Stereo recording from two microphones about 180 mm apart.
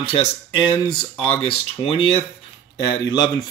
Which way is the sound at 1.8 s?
30° left (ahead or behind).